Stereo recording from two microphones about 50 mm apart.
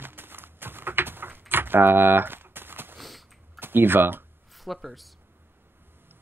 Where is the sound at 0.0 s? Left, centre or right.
Right.